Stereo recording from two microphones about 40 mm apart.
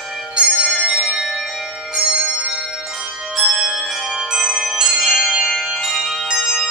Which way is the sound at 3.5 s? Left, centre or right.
Centre.